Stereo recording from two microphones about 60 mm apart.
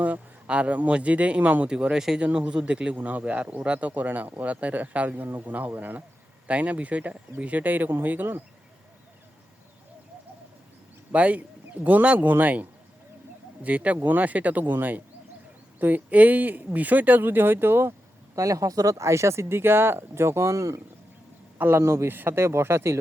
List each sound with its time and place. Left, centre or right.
0.0 s speech: right
1.7 s speech: centre; by 8.4 s right
11.1 s speech: right
18.3 s speech: right
21.6 s speech: right
22.1 s speech: right